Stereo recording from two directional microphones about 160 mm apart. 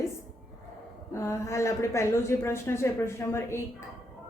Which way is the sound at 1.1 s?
15° left (ahead or behind).